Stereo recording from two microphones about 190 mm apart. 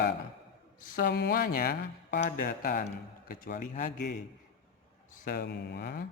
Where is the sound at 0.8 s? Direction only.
45° left (ahead or behind).